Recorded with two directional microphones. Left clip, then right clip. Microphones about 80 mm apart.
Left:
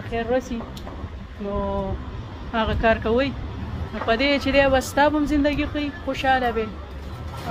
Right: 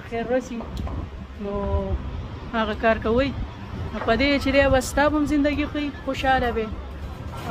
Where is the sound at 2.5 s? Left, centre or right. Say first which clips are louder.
Left 1 dB; right.